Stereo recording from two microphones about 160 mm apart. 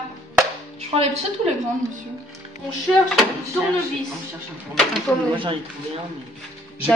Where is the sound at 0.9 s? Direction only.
40° right (ahead or behind).